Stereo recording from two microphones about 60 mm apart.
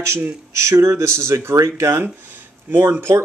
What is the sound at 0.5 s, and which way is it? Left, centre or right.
Speech, right.